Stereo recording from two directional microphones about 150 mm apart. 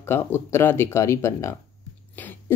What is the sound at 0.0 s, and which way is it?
Speech, 15° left (ahead or behind).